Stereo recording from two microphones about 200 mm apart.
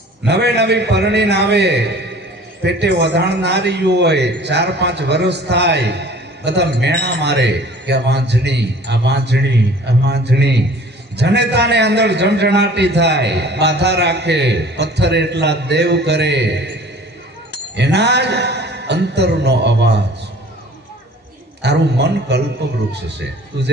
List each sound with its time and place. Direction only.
0.3 s a man's voice: 60° right (ahead or behind)
17.7 s a man's voice: 60° right (ahead or behind)
21.6 s a man's voice: 55° right (ahead or behind)